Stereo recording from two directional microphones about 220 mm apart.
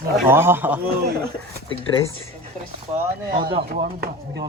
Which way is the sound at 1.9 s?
15° left (ahead or behind).